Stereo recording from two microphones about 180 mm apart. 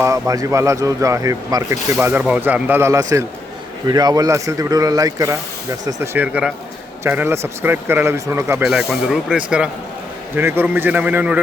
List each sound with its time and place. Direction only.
0.0 s speech: 20° right (ahead or behind)
8.6 s speech: 5° right (ahead or behind)